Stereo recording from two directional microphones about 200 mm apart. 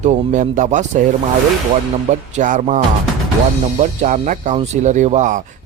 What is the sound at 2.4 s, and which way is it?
Speech, 40° right (ahead or behind).